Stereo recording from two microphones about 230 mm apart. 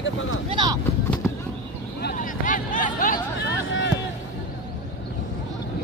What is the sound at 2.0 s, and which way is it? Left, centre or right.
Hubbub, left.